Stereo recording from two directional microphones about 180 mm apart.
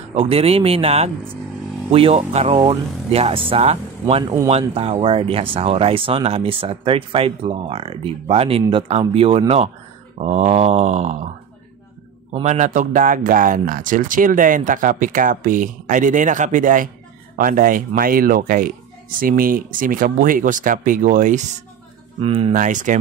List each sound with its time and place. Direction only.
0.1 s speech: 35° right (ahead or behind)
12.3 s a man's voice: 40° right (ahead or behind)
22.2 s speech: 30° right (ahead or behind)
22.5 s a man's voice: 45° right (ahead or behind)